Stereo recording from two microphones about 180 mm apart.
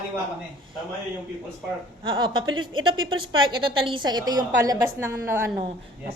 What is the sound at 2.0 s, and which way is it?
A woman's voice, 25° right (ahead or behind).